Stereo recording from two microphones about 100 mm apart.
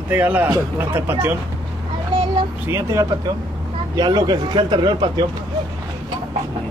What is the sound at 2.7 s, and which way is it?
Speech, 30° right (ahead or behind).